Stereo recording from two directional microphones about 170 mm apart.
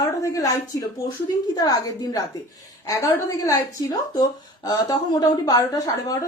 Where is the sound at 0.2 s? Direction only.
20° left (ahead or behind).